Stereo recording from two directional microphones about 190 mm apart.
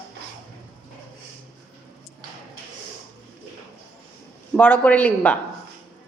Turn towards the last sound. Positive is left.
turn(degrees=5)  # may be behind; listen again after turning